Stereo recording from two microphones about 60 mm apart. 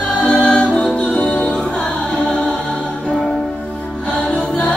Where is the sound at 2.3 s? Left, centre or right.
Centre.